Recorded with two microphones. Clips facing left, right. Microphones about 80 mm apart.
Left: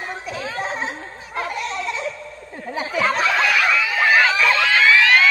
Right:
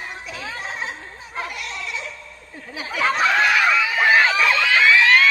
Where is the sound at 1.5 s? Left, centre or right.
Left.